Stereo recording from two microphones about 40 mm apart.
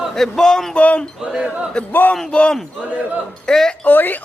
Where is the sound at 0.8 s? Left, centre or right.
Left.